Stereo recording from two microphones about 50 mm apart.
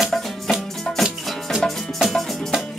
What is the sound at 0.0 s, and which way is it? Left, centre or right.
Music, centre.